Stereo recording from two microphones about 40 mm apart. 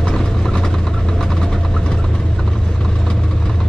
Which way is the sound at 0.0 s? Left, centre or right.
Centre.